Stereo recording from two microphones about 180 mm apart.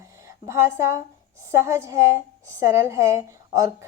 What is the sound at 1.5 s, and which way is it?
A woman's voice, 15° right (ahead or behind).